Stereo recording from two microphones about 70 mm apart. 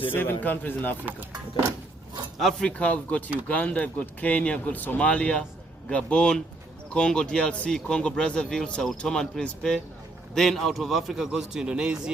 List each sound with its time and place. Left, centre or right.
0.1 s speech: left
2.4 s speech: centre
2.6 s a man's voice: centre